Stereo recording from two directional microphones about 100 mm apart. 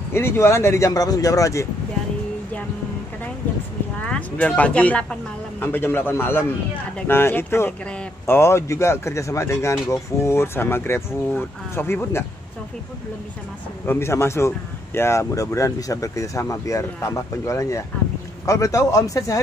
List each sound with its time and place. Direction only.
0.1 s speech: 25° left (ahead or behind)
4.0 s speech: 10° left (ahead or behind)
13.8 s speech: 25° left (ahead or behind)